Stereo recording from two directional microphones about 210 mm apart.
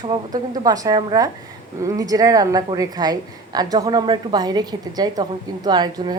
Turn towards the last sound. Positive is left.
turn(degrees=-20)  # may be behind; listen again after turning